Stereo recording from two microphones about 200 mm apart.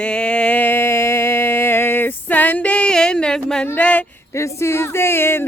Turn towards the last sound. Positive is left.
turn(degrees=10)  # may be behind; listen again after turning